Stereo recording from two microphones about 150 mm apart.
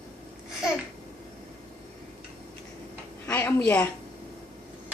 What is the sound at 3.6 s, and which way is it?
Speech, 10° left (ahead or behind).